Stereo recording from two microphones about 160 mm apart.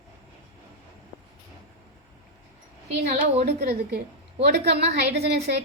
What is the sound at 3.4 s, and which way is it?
A woman's voice, 85° right.